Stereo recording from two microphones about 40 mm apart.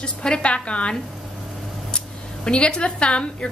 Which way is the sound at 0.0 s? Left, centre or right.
Left.